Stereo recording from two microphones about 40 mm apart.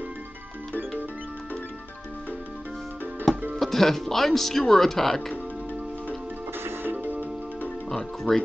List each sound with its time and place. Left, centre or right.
3.5 s speech: centre
6.6 s music: right
7.9 s music: centre